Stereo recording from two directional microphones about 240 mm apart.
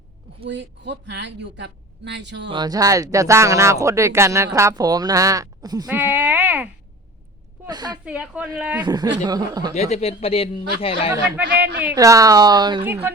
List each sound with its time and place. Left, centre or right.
0.4 s speech: right
2.5 s speech: centre
7.7 s speech: centre
8.0 s speech: centre
9.7 s a man's voice: left
11.8 s speech: centre